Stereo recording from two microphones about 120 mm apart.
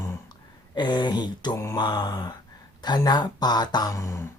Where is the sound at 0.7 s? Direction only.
40° left (ahead or behind).